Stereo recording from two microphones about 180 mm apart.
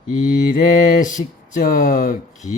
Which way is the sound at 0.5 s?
45° left (ahead or behind).